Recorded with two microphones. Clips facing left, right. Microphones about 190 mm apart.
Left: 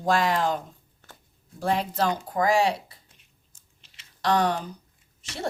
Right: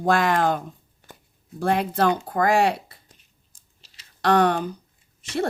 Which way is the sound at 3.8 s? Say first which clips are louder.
Right 2 dB; 35° right (ahead or behind).